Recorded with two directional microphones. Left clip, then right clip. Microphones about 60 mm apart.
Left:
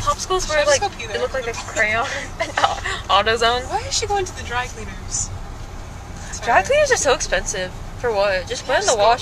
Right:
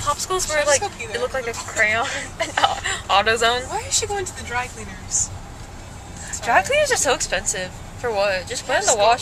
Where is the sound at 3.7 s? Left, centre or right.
Left.